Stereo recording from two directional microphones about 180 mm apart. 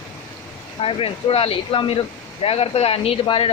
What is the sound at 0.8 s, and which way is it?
Speech, 30° left (ahead or behind).